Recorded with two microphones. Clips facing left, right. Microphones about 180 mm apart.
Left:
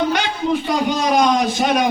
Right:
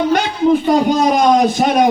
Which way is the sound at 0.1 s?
50° right (ahead or behind).